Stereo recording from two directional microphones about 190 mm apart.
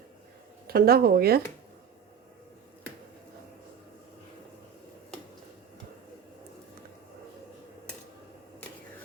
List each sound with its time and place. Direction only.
0.7 s speech: 55° right (ahead or behind)